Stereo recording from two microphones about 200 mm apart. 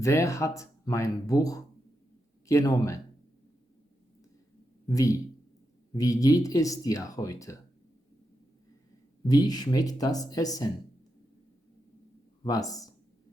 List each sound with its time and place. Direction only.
0.0 s speech: 15° left (ahead or behind)
4.9 s speech: 15° left (ahead or behind)
9.2 s speech: 20° left (ahead or behind)
12.4 s speech: 20° left (ahead or behind)